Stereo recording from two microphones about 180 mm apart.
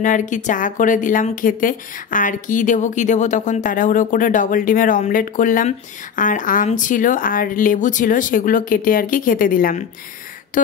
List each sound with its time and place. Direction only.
0.0 s speech: 45° left (ahead or behind)